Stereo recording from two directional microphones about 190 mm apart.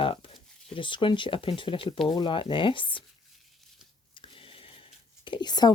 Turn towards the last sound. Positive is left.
turn(degrees=20)  # may be behind; listen again after turning